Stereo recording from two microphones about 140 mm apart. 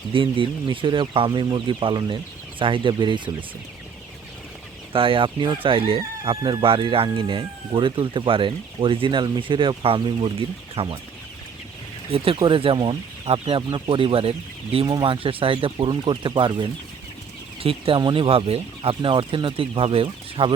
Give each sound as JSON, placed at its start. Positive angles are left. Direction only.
{"t": 0.1, "sound": "speech", "side_deg": -40}
{"t": 4.9, "sound": "speech", "side_deg": -40}
{"t": 12.1, "sound": "speech", "side_deg": -40}